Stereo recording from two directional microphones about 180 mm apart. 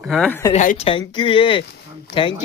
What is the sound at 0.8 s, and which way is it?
Speech, 30° left (ahead or behind).